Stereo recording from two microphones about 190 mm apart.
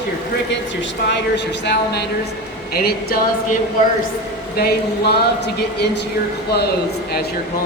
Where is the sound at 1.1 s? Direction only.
65° left (ahead or behind).